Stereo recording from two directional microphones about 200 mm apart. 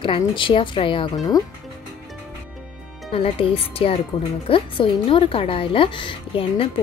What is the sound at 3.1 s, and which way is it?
Speech, 30° left (ahead or behind).